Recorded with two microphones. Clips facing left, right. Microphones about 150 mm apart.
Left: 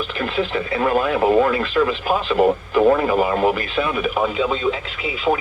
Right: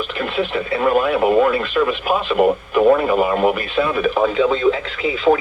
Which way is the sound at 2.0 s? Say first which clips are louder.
Right 2 dB; 20° right (ahead or behind).